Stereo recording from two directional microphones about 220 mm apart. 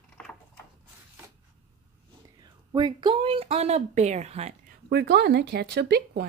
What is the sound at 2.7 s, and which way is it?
Speech, 20° right (ahead or behind).